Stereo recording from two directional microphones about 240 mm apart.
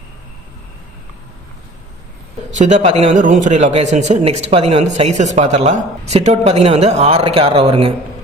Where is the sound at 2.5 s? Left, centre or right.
Right.